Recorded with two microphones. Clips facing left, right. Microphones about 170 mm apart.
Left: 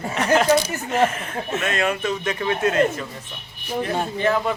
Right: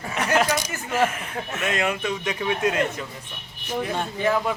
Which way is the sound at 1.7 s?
15° right (ahead or behind).